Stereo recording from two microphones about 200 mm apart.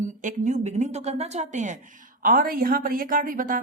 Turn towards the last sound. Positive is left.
turn(degrees=-45)  # may be behind; listen again after turning